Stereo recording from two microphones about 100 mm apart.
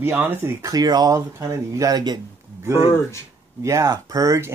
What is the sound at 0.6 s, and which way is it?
Speech, 40° right (ahead or behind).